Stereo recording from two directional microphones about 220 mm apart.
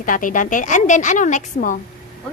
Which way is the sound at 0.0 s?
35° left (ahead or behind).